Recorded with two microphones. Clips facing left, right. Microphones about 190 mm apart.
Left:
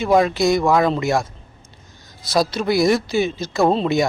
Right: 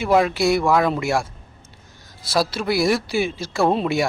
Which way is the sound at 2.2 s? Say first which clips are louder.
Left 2 dB; 5° right (ahead or behind).